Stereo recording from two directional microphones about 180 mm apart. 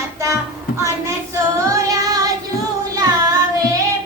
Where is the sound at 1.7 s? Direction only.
20° right (ahead or behind).